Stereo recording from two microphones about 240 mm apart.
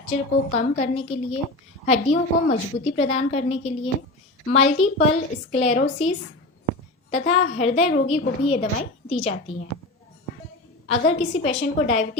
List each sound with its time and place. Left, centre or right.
0.1 s a woman's voice: left
10.8 s a woman's voice: left